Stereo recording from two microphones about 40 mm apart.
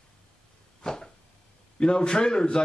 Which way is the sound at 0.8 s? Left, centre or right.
Centre.